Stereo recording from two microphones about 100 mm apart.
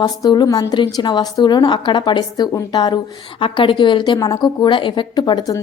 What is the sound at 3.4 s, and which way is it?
A woman's voice, 55° left (ahead or behind).